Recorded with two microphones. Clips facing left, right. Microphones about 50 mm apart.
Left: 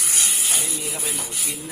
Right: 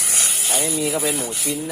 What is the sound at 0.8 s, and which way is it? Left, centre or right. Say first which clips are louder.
Speech: right 8 dB; right.